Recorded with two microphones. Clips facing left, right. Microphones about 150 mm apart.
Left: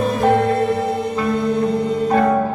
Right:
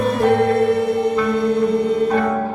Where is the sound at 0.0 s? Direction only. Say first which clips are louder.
Even; 60° right (ahead or behind).